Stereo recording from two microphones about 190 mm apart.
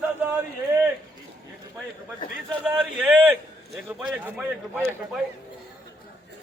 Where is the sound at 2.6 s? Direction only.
5° right (ahead or behind).